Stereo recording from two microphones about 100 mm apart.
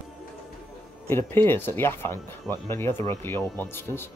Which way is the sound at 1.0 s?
20° left (ahead or behind).